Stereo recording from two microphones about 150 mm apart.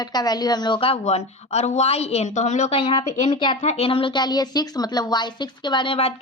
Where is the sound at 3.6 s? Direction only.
45° left (ahead or behind).